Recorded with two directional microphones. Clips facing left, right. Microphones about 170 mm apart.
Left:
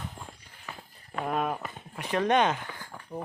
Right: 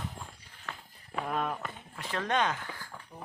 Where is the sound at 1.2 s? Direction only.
10° left (ahead or behind).